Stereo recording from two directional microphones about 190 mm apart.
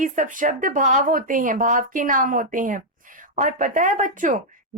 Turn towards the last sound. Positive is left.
turn(degrees=-45)  # may be behind; listen again after turning